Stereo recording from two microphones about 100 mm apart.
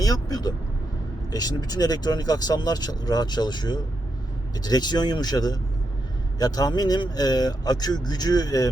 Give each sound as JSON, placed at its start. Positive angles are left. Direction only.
{"t": 0.0, "sound": "speech", "side_deg": 40}